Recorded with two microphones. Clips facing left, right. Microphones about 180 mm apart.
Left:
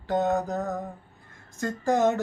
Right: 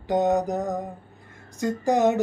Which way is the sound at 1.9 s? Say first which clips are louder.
Right 2 dB; 15° right (ahead or behind).